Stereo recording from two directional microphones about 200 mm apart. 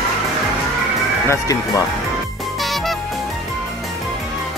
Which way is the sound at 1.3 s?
15° left (ahead or behind).